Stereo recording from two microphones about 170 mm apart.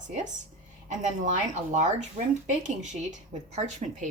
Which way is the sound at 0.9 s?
45° right (ahead or behind).